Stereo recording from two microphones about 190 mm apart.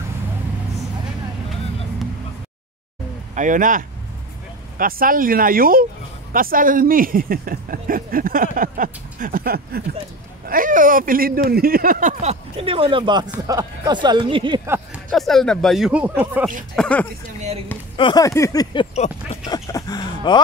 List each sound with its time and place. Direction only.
3.3 s speech: 45° right (ahead or behind); by 14.6 s 25° right (ahead or behind)
15.0 s speech: centre (ahead or behind)
16.7 s speech: 5° left (ahead or behind)
17.4 s a sound: 35° right (ahead or behind)
17.9 s speech: 25° left (ahead or behind)